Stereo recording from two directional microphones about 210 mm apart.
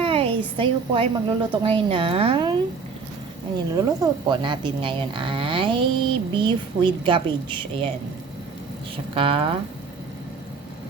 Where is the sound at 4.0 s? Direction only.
20° right (ahead or behind).